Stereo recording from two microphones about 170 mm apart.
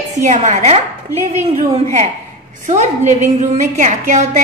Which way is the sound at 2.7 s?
45° right (ahead or behind).